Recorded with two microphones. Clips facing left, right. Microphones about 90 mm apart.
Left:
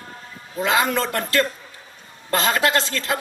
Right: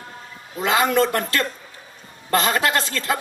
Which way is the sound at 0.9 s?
35° right (ahead or behind).